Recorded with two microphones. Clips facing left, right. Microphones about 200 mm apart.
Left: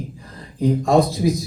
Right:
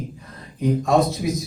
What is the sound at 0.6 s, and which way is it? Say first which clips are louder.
Speech: left 2 dB; 30° left (ahead or behind).